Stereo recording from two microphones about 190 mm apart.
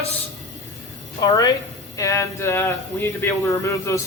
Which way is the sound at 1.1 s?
20° left (ahead or behind).